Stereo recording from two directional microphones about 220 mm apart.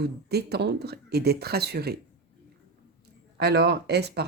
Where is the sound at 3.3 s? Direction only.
50° right (ahead or behind).